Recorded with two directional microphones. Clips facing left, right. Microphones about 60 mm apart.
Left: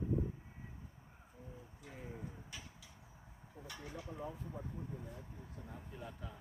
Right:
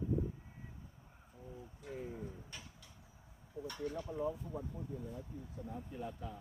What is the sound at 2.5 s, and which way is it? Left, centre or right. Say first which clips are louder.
Vehicle: even; centre.